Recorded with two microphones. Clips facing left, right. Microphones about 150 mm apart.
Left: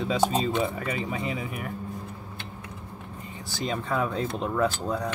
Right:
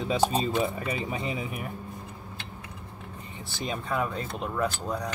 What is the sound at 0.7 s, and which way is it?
Speech, 25° right (ahead or behind).